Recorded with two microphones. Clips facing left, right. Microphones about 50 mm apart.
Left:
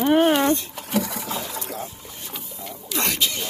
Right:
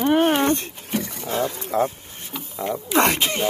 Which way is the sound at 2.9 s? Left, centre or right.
Right.